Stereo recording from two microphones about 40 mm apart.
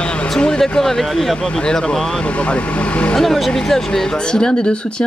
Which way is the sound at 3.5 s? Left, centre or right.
Centre.